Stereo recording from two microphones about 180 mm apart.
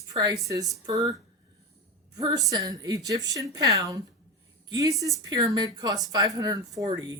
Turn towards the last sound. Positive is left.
turn(degrees=-20)  # may be behind; listen again after turning